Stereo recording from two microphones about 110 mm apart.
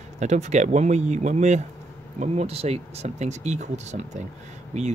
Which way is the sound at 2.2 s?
75° right (ahead or behind).